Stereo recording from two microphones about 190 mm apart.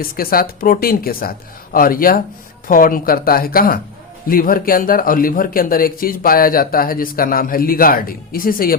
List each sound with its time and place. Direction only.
0.0 s a man's voice: 50° left (ahead or behind)